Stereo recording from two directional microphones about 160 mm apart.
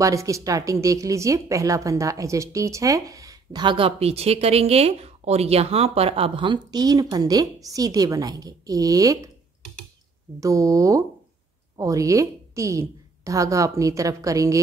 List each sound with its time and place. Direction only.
0.0 s a woman's voice: 20° right (ahead or behind)
10.4 s a woman's voice: 20° right (ahead or behind)